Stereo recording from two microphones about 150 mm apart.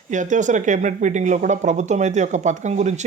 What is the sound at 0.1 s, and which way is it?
Speech, 55° right (ahead or behind).